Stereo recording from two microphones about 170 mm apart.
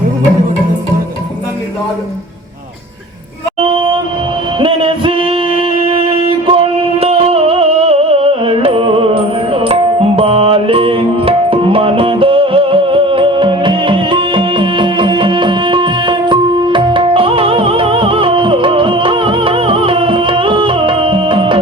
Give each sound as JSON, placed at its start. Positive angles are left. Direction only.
{"t": 3.6, "sound": "music", "side_deg": -30}